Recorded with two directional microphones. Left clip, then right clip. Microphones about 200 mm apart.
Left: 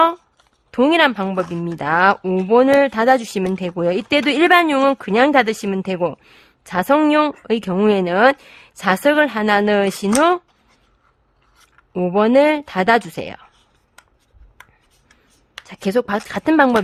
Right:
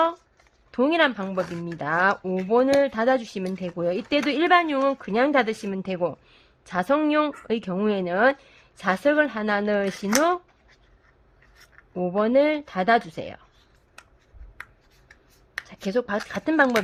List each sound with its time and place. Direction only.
0.7 s speech: 35° left (ahead or behind)
11.9 s speech: 40° left (ahead or behind)
15.6 s speech: 35° left (ahead or behind)